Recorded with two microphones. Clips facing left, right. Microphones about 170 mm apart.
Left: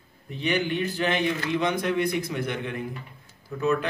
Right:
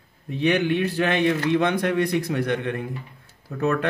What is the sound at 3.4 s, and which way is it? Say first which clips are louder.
Speech: right 1 dB; 65° right (ahead or behind).